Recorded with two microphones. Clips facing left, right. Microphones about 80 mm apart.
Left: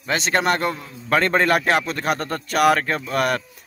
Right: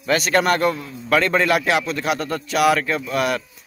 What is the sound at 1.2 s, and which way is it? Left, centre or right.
A man's voice, left.